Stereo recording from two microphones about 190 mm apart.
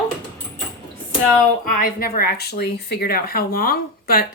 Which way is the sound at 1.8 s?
50° left (ahead or behind).